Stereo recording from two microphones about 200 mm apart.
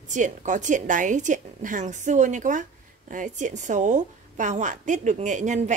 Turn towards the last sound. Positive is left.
turn(degrees=-35)  # may be behind; listen again after turning